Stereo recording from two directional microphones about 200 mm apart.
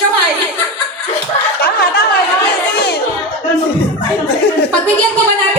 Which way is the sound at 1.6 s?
50° left (ahead or behind).